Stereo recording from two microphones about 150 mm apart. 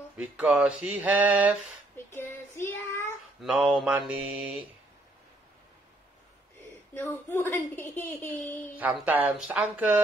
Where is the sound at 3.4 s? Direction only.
5° right (ahead or behind).